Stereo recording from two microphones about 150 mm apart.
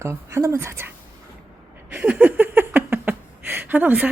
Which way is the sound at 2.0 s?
10° right (ahead or behind).